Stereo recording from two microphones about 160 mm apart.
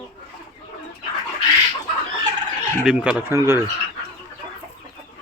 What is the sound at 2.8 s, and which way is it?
Speech, 5° right (ahead or behind).